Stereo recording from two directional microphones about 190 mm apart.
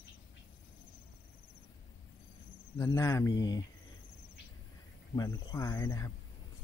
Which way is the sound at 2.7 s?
15° left (ahead or behind).